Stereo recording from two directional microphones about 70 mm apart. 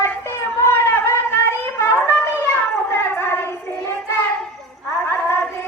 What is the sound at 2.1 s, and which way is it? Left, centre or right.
Shofar, left.